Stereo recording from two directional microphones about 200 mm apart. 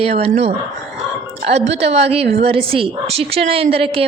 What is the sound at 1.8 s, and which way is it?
Speech, 30° right (ahead or behind).